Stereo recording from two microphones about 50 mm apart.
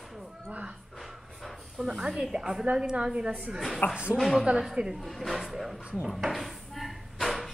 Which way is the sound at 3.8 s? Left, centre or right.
Left.